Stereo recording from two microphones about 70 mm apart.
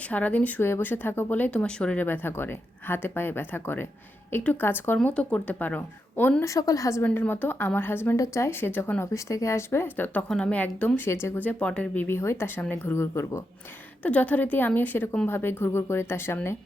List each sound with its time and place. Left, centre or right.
0.0 s speech: centre
0.6 s speech: left; by 2.0 s centre
2.0 s a woman's voice: left
5.0 s speech: centre
6.4 s a woman's voice: left
7.0 s a woman's voice: left
8.1 s a woman's voice: left
9.0 s a woman's voice: left
10.2 s a woman's voice: centre
10.5 s speech: left
11.3 s speech: left
12.0 s a woman's voice: left
14.0 s a woman's voice: left